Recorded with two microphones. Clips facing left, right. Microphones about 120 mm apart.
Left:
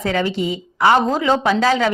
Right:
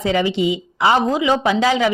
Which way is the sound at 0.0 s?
20° right (ahead or behind).